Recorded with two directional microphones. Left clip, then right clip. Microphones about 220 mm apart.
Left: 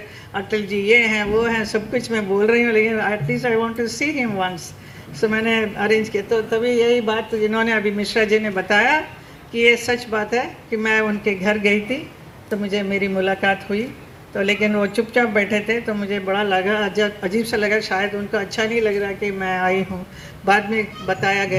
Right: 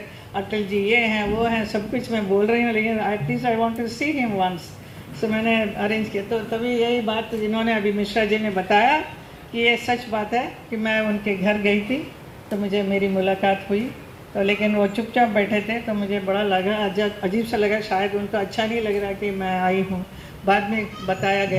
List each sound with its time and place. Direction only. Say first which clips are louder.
0.3 s speech: left 2 dB; 50° left (ahead or behind)